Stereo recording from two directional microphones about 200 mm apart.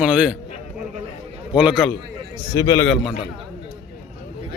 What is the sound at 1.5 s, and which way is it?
Speech, 5° right (ahead or behind).